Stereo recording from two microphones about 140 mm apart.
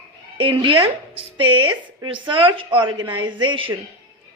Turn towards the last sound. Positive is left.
turn(degrees=-35)  # may be behind; listen again after turning